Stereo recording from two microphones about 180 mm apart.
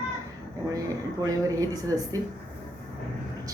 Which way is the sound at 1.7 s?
20° right (ahead or behind).